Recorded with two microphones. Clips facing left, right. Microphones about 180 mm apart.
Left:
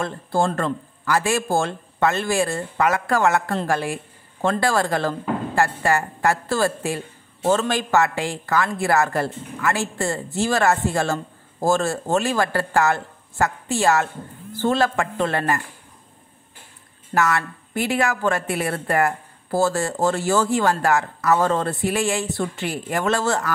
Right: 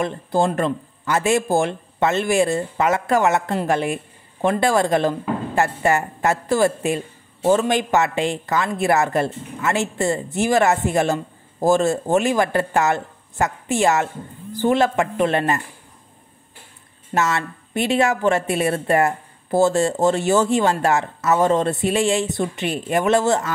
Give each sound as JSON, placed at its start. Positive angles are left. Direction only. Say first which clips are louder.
{"t": 0.0, "sound": "speech", "louder": "right 2 dB", "side_deg": -20}
{"t": 17.1, "sound": "speech", "louder": "even", "side_deg": -25}